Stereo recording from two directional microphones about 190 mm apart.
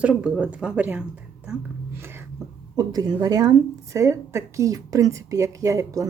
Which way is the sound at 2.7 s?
20° right (ahead or behind).